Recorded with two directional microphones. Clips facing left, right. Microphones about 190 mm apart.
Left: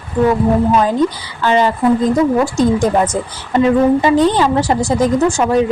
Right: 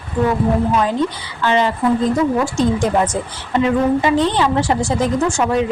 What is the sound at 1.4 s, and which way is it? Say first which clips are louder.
Speech: left 3 dB; 40° left (ahead or behind).